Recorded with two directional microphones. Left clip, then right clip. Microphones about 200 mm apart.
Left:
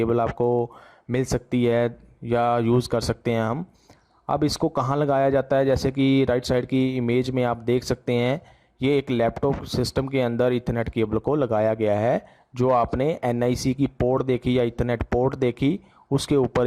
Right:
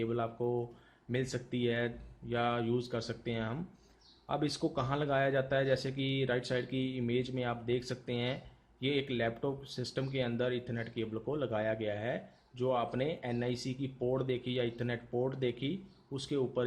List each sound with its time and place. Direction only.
0.0 s speech: 45° left (ahead or behind)